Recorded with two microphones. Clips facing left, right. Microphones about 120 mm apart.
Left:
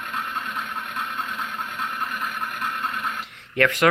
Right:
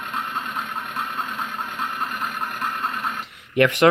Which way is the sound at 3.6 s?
25° right (ahead or behind).